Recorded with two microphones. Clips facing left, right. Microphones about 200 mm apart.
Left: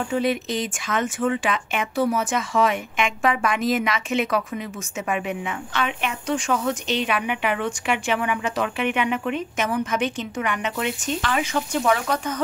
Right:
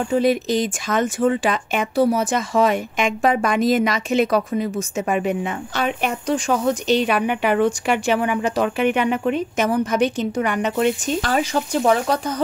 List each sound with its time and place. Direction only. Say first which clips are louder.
0.1 s speech: right 6 dB; 40° right (ahead or behind)